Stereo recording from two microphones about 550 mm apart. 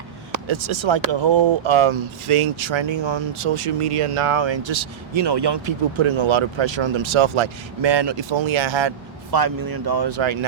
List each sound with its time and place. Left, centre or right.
0.4 s speech: right
9.3 s speech: right